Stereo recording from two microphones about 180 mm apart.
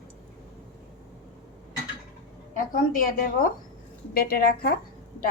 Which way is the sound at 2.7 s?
50° left (ahead or behind).